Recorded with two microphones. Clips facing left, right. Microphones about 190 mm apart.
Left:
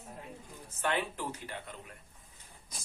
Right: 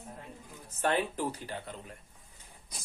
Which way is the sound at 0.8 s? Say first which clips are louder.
Right 4 dB; 35° right (ahead or behind).